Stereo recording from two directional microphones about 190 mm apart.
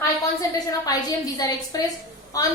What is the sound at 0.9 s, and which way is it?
A woman's voice, 20° left (ahead or behind).